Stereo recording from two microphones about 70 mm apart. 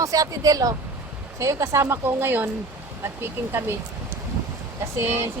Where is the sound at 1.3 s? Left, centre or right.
Right.